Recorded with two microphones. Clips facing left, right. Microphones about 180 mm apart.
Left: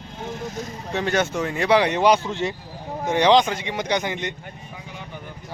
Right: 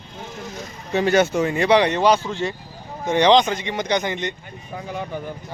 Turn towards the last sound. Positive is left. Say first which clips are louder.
# right 9 dB
turn(degrees=-55)  # may be behind; listen again after turning